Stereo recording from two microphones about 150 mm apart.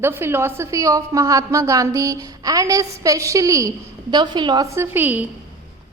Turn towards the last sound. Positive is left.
turn(degrees=-10)  # may be behind; listen again after turning